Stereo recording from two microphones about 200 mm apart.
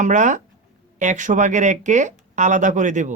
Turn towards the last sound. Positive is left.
turn(degrees=-40)  # may be behind; listen again after turning